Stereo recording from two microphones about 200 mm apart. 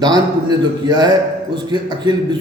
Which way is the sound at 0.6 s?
20° right (ahead or behind).